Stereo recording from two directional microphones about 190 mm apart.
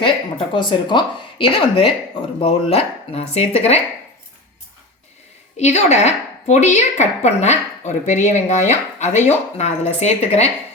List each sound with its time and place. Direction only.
0.0 s a woman's voice: 25° left (ahead or behind)
5.5 s a woman's voice: 35° left (ahead or behind)